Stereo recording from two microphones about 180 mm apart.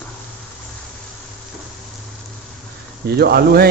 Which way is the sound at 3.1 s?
60° right (ahead or behind).